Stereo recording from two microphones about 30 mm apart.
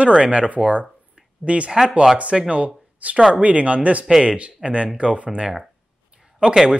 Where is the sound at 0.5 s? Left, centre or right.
Right.